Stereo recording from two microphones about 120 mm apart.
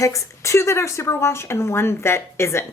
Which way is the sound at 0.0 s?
25° left (ahead or behind).